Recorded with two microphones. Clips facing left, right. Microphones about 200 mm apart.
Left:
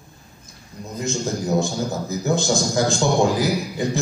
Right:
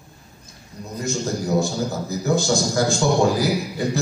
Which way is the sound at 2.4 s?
20° left (ahead or behind).